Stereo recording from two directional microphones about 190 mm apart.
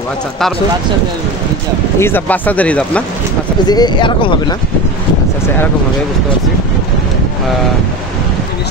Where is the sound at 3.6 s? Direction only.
20° left (ahead or behind).